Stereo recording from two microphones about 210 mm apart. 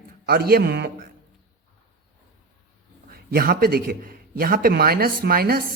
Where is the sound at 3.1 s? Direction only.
45° right (ahead or behind).